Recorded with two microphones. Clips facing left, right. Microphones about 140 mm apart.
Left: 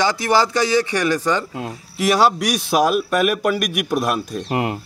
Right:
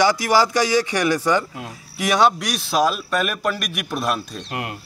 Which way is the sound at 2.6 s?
50° left (ahead or behind).